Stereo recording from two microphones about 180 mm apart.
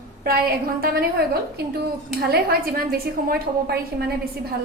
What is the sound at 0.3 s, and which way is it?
A woman's voice, 55° right (ahead or behind).